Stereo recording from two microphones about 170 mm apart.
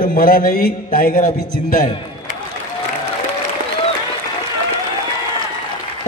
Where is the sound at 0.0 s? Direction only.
50° left (ahead or behind).